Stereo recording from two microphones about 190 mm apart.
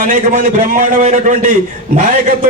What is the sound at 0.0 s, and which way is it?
A man's voice, 40° right (ahead or behind).